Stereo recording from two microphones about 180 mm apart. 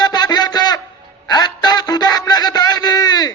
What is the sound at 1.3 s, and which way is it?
Music, 25° left (ahead or behind).